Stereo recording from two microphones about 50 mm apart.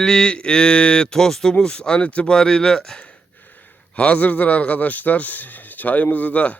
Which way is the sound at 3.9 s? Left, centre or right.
Left.